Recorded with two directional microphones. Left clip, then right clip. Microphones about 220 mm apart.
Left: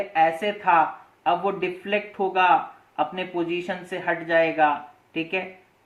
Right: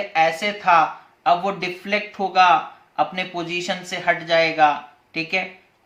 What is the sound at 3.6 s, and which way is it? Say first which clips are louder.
Speech: right 5 dB; 25° right (ahead or behind).